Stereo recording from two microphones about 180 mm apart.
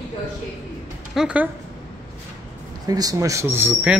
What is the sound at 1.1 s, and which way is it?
Speech, 5° right (ahead or behind).